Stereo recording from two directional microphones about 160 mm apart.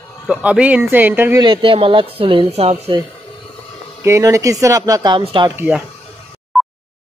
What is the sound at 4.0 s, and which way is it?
Speech, 20° right (ahead or behind).